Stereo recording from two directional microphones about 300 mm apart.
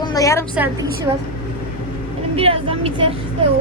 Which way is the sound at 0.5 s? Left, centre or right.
Centre.